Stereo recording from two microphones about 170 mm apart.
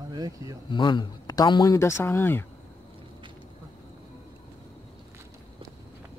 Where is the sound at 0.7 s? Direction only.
25° left (ahead or behind).